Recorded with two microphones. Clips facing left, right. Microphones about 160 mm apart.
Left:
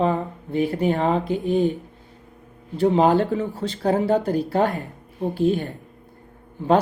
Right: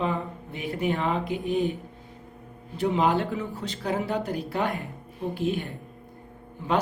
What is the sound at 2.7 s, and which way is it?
Speech, 35° left (ahead or behind).